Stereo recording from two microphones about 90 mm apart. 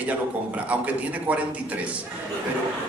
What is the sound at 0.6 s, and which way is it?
A man's voice, 15° right (ahead or behind).